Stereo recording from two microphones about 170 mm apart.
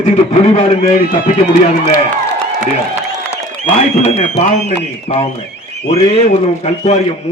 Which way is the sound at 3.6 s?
35° left (ahead or behind).